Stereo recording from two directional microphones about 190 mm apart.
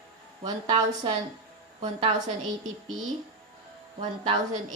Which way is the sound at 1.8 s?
30° right (ahead or behind).